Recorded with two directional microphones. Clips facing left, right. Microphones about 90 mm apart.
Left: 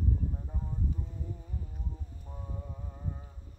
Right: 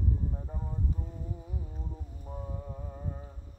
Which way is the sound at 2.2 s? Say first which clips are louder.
Right 4 dB; 15° right (ahead or behind).